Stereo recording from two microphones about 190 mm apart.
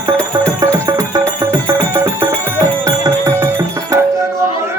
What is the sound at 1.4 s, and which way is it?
Music, 15° right (ahead or behind).